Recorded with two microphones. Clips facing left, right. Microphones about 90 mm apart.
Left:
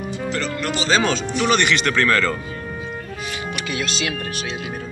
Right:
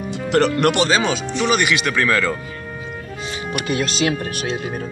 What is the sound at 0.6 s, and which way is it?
Speech, 65° right (ahead or behind).